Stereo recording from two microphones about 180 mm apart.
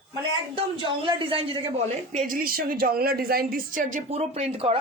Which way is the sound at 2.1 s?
45° right (ahead or behind).